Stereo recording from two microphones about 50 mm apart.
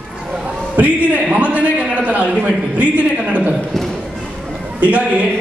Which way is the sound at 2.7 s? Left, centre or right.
Right.